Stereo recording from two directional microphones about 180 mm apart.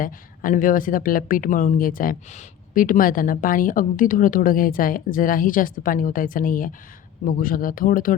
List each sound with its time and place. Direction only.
0.0 s speech: 50° left (ahead or behind)